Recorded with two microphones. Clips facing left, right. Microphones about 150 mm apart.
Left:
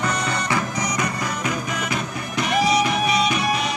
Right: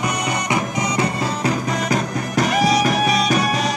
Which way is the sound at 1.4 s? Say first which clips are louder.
Right 5 dB; 40° right (ahead or behind).